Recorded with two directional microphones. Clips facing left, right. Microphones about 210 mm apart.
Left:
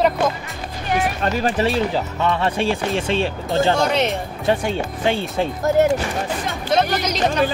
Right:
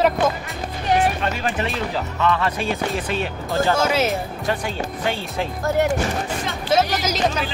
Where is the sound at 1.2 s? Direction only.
40° left (ahead or behind).